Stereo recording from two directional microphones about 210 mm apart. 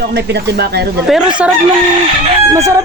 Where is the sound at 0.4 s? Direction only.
50° right (ahead or behind).